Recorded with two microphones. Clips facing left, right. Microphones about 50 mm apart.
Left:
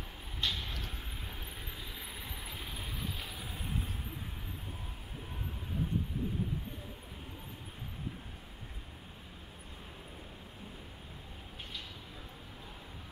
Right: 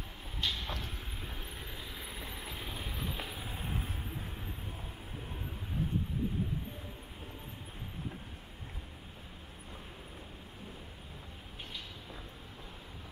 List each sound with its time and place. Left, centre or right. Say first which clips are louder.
0.4 s vehicle: even; centre
3.2 s vehicle: right 2 dB; centre